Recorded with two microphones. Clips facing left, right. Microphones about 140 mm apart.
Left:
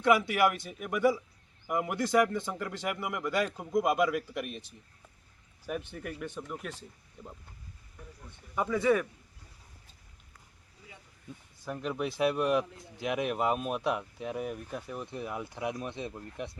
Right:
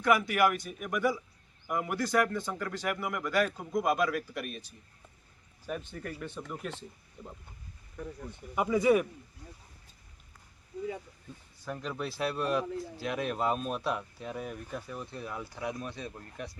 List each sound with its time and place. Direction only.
0.0 s a man's voice: 25° left (ahead or behind); by 7.3 s centre (ahead or behind)
8.5 s speech: 15° right (ahead or behind)
11.7 s a man's voice: 10° left (ahead or behind)